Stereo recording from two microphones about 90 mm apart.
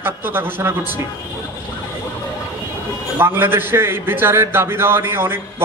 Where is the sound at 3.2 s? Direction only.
25° right (ahead or behind).